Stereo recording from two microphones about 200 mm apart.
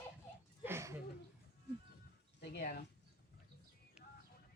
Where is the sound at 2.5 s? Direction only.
45° left (ahead or behind).